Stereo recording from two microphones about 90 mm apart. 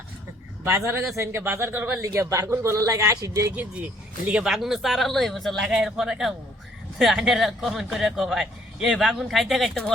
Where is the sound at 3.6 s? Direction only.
15° right (ahead or behind).